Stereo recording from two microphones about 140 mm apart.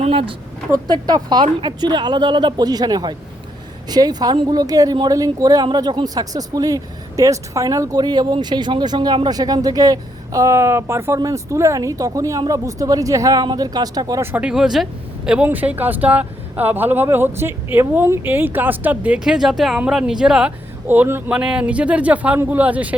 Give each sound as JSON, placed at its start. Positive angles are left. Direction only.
{"t": 0.0, "sound": "a sound", "side_deg": -40}
{"t": 0.7, "sound": "a woman's voice", "side_deg": -30}
{"t": 14.3, "sound": "speech", "side_deg": -5}